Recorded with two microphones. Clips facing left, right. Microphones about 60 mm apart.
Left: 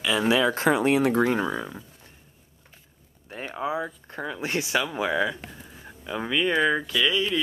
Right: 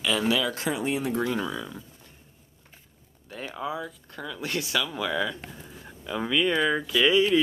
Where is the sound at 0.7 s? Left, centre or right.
Left.